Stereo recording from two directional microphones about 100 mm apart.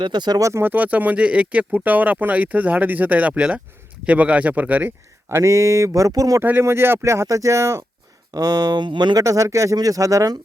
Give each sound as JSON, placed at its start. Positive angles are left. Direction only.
{"t": 0.0, "sound": "speech", "side_deg": -45}
{"t": 5.3, "sound": "speech", "side_deg": -30}
{"t": 6.4, "sound": "speech", "side_deg": -20}
{"t": 8.3, "sound": "speech", "side_deg": -40}
{"t": 9.1, "sound": "speech", "side_deg": -35}